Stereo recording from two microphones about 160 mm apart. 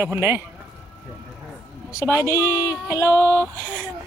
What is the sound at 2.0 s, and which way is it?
Speech, 15° right (ahead or behind).